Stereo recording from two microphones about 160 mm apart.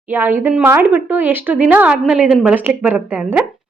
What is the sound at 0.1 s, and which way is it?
A woman's voice, 10° right (ahead or behind).